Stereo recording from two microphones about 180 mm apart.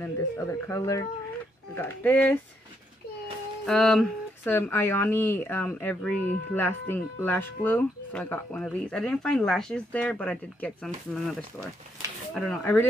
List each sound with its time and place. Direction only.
0.0 s a woman's voice: 15° left (ahead or behind)
3.6 s speech: centre (ahead or behind)
4.5 s a woman's voice: 10° left (ahead or behind)
12.4 s a woman's voice: 10° left (ahead or behind)